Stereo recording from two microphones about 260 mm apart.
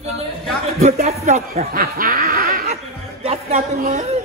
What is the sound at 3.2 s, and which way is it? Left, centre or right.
Speech, right.